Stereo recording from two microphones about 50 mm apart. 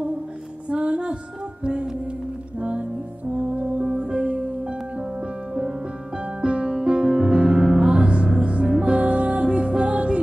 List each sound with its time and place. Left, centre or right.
0.7 s music: right
3.3 s music: right
6.4 s music: centre